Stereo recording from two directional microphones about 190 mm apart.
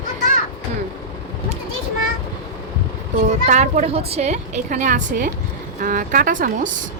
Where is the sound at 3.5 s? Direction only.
35° right (ahead or behind).